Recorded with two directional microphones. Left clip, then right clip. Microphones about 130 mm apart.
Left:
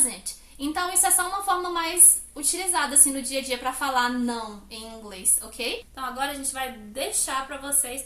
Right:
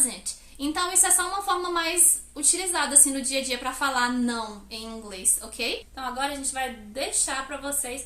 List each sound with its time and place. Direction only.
0.6 s a woman's voice: 20° right (ahead or behind)
6.0 s a woman's voice: 5° left (ahead or behind)